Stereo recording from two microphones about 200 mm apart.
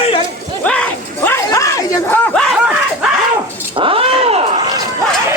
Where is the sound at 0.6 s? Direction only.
5° left (ahead or behind).